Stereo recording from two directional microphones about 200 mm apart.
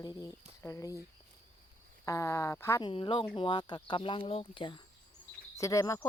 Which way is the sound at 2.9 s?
25° left (ahead or behind).